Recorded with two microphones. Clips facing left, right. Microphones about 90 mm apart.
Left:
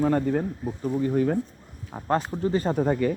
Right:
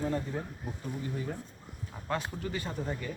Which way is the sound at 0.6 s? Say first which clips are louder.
Left 11 dB; 35° left (ahead or behind).